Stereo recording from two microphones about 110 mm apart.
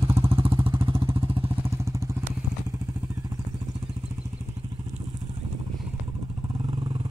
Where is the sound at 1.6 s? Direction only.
25° right (ahead or behind).